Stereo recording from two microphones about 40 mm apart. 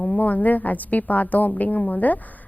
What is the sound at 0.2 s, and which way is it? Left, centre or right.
A woman's voice, left.